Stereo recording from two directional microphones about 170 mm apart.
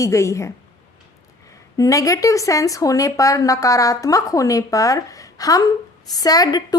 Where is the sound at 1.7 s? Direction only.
20° left (ahead or behind).